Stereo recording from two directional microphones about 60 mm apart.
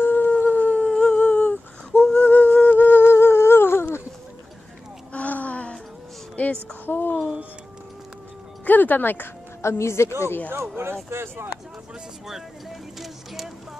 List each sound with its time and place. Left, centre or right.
0.0 s humming: left
5.1 s a sound: left
6.9 s a sound: left
8.6 s speech: left
9.6 s speech: left
11.1 s speech: right
13.0 s speech: centre